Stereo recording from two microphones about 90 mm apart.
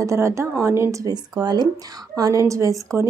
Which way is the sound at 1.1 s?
50° right (ahead or behind).